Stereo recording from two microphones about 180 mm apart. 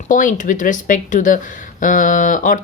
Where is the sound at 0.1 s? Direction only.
45° left (ahead or behind).